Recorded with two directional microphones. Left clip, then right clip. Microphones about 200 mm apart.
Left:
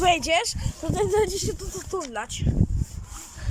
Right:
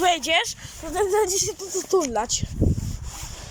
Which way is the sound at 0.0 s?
10° left (ahead or behind).